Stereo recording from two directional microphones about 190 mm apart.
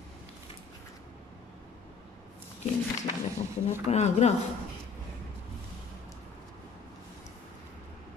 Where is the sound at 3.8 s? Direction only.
35° left (ahead or behind).